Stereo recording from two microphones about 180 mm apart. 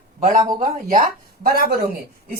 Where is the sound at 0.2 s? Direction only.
40° right (ahead or behind).